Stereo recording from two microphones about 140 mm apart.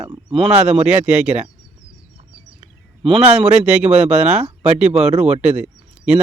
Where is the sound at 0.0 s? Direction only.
25° right (ahead or behind).